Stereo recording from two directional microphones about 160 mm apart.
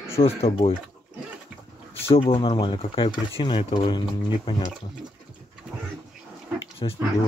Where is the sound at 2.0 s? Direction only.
35° left (ahead or behind).